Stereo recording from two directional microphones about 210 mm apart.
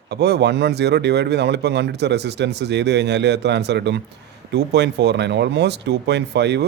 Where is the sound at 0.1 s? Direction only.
55° right (ahead or behind).